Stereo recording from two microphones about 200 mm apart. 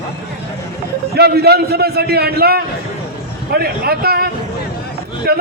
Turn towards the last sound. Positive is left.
turn(degrees=-50)  # may be behind; listen again after turning